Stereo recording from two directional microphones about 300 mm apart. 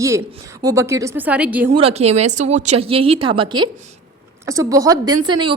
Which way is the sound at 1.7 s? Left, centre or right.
Centre.